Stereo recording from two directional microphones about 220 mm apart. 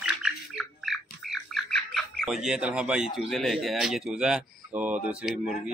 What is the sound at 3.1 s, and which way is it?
Speech, centre (ahead or behind).